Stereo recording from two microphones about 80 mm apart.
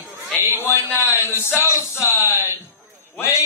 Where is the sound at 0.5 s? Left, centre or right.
Left.